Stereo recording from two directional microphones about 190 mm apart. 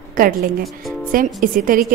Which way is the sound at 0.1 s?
50° right (ahead or behind).